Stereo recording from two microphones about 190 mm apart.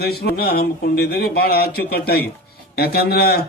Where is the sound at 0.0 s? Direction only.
55° left (ahead or behind).